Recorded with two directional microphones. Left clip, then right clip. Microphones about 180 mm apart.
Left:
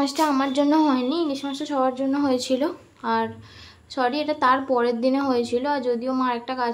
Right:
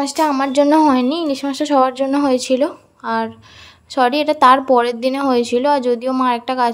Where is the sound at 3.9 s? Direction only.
45° right (ahead or behind).